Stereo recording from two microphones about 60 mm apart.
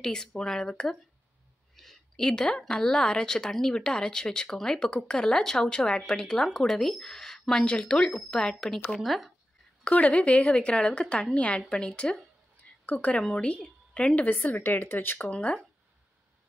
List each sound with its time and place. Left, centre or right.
0.0 s a woman's voice: centre
1.8 s a sound: centre
2.1 s a woman's voice: centre
9.8 s a woman's voice: left
15.1 s a woman's voice: centre